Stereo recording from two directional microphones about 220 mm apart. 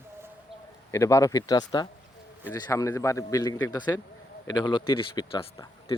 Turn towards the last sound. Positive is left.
turn(degrees=20)  # may be behind; listen again after turning